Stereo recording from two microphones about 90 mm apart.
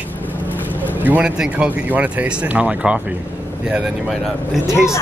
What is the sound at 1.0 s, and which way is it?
Speech, 15° right (ahead or behind).